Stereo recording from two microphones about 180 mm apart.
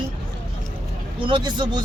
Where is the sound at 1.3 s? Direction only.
25° right (ahead or behind).